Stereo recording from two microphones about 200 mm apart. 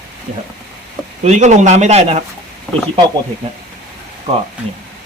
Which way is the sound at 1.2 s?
35° right (ahead or behind).